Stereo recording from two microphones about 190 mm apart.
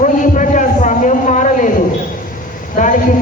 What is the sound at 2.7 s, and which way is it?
Vehicle, 45° left (ahead or behind).